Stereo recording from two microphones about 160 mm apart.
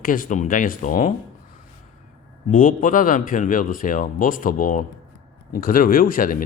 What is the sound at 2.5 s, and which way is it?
Speech, 55° left (ahead or behind).